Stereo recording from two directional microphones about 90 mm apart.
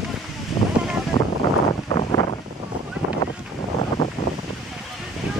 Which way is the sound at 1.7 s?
80° left.